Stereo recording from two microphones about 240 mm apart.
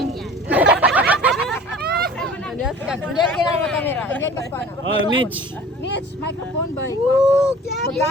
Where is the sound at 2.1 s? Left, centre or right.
Centre.